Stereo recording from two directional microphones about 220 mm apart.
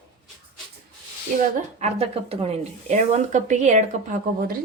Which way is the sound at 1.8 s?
25° right (ahead or behind).